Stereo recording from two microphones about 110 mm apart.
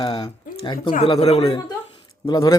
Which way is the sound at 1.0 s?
70° left (ahead or behind).